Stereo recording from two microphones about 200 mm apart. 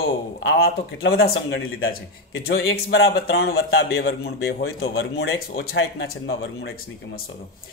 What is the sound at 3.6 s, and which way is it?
Speech, 75° left (ahead or behind).